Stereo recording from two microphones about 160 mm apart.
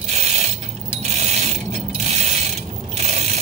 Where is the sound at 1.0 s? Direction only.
45° right (ahead or behind).